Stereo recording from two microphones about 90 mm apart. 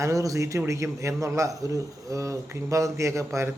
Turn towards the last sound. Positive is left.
turn(degrees=-35)  # may be behind; listen again after turning